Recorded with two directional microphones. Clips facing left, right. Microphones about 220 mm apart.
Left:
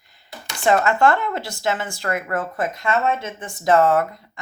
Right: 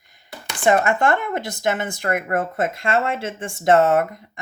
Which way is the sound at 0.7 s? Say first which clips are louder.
Even; 15° right (ahead or behind).